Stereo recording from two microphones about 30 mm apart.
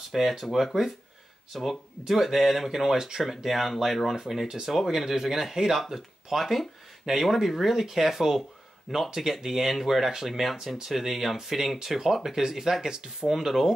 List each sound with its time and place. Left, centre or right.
0.1 s speech: centre
3.4 s speech: centre
4.1 s speech: centre
4.7 s speech: centre
13.3 s speech: centre